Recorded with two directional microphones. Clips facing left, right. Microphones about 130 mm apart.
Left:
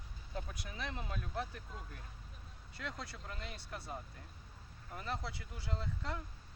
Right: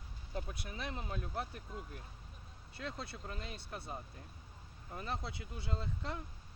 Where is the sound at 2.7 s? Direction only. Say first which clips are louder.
Right 2 dB; 25° right (ahead or behind).